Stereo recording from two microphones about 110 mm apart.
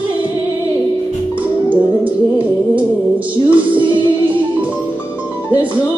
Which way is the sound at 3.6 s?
50° right (ahead or behind).